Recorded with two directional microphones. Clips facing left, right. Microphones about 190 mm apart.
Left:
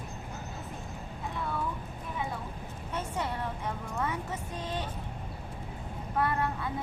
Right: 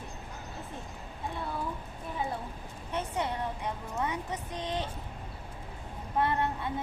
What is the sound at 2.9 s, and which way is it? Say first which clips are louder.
A woman's voice: right 2 dB; 20° right (ahead or behind).